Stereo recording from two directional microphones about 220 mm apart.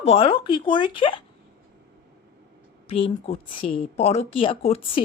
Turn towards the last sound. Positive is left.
turn(degrees=25)  # may be behind; listen again after turning